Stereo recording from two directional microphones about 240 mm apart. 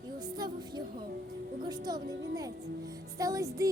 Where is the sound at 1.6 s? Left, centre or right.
Centre.